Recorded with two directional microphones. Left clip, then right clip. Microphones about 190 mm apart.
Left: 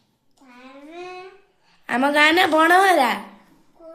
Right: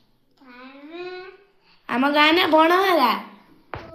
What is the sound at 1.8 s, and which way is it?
A woman's voice, 20° left (ahead or behind).